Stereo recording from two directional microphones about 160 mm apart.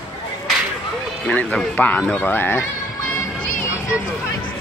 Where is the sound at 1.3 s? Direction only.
10° left (ahead or behind).